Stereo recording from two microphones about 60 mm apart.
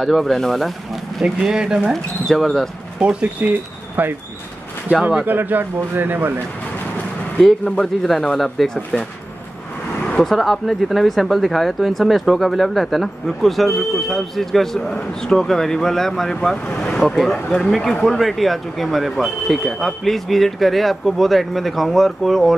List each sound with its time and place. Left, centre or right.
0.0 s speech: centre
1.2 s speech: centre
2.2 s speech: centre
3.0 s speech: right
5.2 s a man's voice: right
7.3 s speech: centre
10.0 s a sound: centre
10.3 s speech: centre